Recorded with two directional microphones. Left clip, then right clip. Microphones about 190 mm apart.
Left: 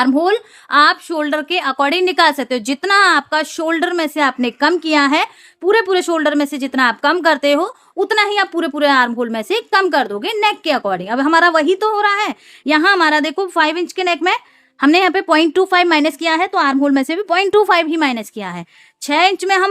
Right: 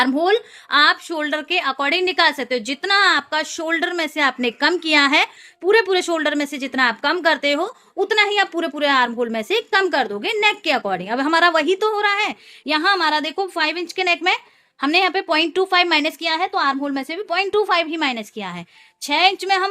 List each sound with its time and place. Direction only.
0.0 s speech: 25° left (ahead or behind); by 19.6 s 40° left (ahead or behind)